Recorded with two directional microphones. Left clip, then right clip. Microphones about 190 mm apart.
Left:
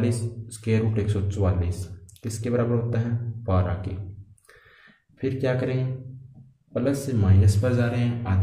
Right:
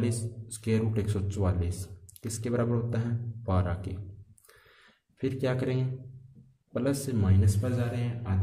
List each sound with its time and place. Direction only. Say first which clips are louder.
0.0 s speech: left 5 dB; 25° right (ahead or behind)
5.2 s speech: left 5 dB; 30° right (ahead or behind); by 8.4 s 10° right (ahead or behind)